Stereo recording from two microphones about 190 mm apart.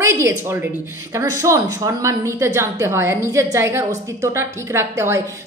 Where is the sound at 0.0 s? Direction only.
15° right (ahead or behind).